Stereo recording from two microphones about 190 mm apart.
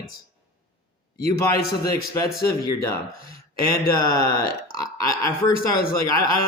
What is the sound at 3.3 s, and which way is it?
Speech, 50° left (ahead or behind).